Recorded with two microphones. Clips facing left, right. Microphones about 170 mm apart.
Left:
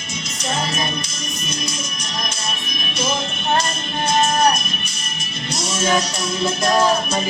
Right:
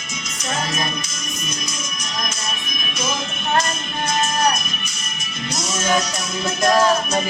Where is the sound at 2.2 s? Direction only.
30° left (ahead or behind).